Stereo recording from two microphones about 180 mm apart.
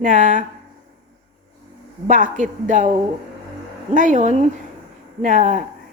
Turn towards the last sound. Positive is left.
turn(degrees=-45)  # may be behind; listen again after turning